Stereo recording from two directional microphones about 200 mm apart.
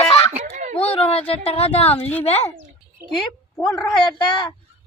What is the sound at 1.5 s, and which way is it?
Speech, 30° left (ahead or behind).